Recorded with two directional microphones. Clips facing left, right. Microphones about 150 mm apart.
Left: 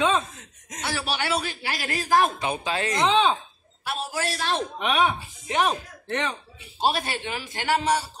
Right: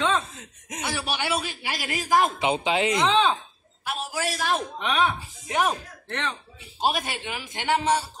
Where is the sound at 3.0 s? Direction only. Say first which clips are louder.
Left 4 dB; centre (ahead or behind).